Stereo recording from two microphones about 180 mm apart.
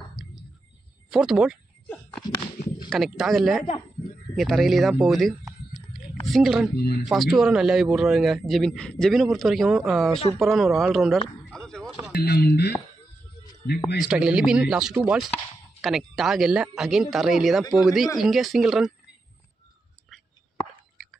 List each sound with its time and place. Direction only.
1.1 s speech: 5° right (ahead or behind)
2.9 s speech: centre (ahead or behind)
6.8 s speech: 65° left (ahead or behind)
7.1 s speech: centre (ahead or behind)
11.4 s a sound: 5° left (ahead or behind)
12.1 s speech: 60° left (ahead or behind)
13.9 s speech: 5° right (ahead or behind)
15.0 s chopping: 5° right (ahead or behind)
15.3 s speech: centre (ahead or behind)